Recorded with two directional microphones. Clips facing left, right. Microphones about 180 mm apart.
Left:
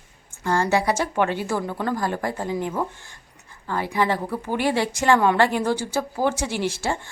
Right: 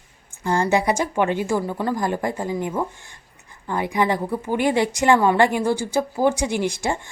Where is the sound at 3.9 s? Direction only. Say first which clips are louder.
Right 2 dB; 15° right (ahead or behind).